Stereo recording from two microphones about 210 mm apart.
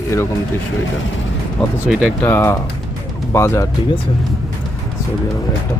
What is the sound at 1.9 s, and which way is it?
Speech, centre (ahead or behind).